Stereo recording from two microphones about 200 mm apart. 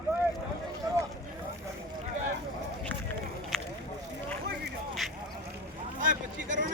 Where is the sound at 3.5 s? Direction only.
Centre (ahead or behind).